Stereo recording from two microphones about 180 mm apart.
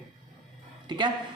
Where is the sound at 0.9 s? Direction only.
25° right (ahead or behind).